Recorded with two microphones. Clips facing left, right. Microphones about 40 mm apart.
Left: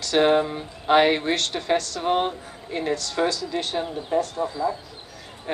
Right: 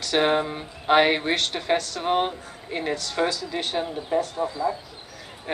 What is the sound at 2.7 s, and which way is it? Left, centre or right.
Speech, centre.